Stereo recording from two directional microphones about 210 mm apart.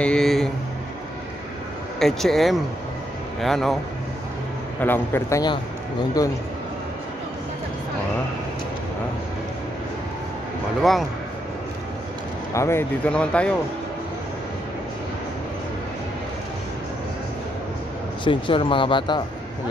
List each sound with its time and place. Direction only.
0.0 s a sound: 5° left (ahead or behind)
2.0 s speech: centre (ahead or behind)
4.7 s a man's voice: 10° left (ahead or behind)
10.8 s speech: centre (ahead or behind)
12.5 s speech: 10° left (ahead or behind)
18.2 s speech: 25° left (ahead or behind)